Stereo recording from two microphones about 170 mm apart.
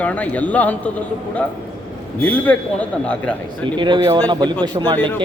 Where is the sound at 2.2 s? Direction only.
10° left (ahead or behind).